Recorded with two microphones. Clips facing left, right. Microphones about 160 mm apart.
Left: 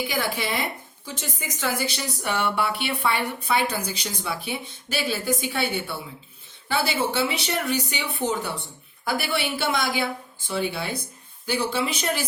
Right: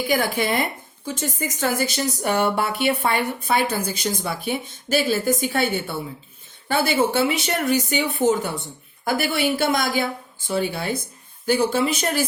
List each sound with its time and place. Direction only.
0.1 s speech: 50° right (ahead or behind)